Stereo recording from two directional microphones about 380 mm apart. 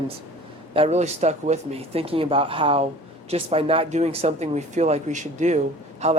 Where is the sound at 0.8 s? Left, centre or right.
Centre.